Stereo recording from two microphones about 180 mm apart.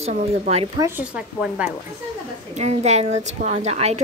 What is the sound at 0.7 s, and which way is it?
Speech, 15° right (ahead or behind).